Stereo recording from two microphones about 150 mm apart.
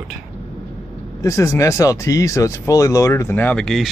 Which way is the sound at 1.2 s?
20° left (ahead or behind).